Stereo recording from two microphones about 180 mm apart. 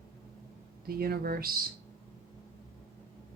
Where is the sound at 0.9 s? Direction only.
55° right (ahead or behind).